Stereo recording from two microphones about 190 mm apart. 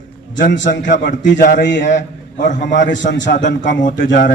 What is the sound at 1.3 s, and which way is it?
Speech, 45° left (ahead or behind).